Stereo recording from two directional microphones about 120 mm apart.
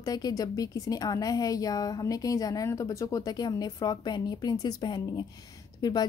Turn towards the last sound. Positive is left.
turn(degrees=35)  # may be behind; listen again after turning